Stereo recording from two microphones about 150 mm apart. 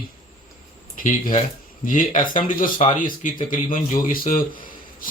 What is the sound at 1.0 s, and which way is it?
Speech, 60° left (ahead or behind).